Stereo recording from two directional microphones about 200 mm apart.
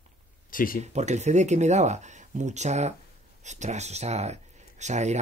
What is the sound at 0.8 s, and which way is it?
Speech, 35° right (ahead or behind).